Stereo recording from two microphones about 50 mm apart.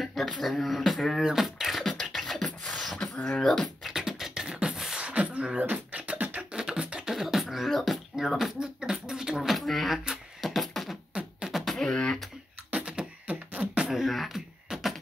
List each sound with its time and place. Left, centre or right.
0.0 s a sound: centre
0.5 s speech: centre
1.2 s beatboxing: centre
3.3 s a sound: centre
3.9 s beatboxing: centre
5.0 s beatboxing: right
6.6 s beatboxing: centre
8.5 s beatboxing: centre
9.7 s a sound: centre
10.4 s beatboxing: centre
11.8 s beatboxing: centre
12.7 s beatboxing: right
13.8 s beatboxing: centre
14.7 s a sound: centre